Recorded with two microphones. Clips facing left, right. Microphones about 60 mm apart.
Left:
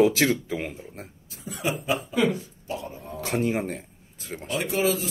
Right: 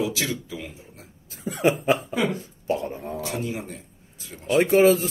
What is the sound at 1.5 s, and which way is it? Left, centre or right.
Speech, right.